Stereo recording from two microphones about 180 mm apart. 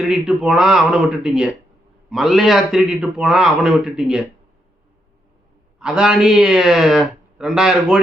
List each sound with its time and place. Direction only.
0.0 s a man's voice: centre (ahead or behind)
5.8 s a man's voice: 5° right (ahead or behind)